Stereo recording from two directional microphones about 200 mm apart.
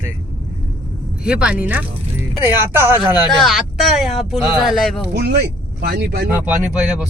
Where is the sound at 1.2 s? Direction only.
5° right (ahead or behind).